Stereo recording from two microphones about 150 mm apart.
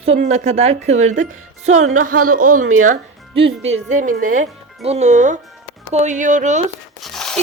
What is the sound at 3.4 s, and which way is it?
A woman's voice, 40° right (ahead or behind).